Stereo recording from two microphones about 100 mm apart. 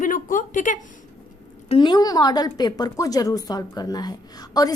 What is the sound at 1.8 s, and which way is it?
A woman's voice, 45° left (ahead or behind).